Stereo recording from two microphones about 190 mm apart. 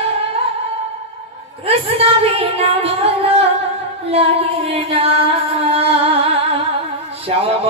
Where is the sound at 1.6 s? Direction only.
30° right (ahead or behind).